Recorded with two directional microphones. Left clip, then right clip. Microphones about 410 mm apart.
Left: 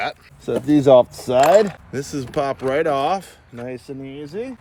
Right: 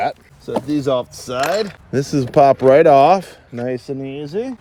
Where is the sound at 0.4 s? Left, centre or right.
Centre.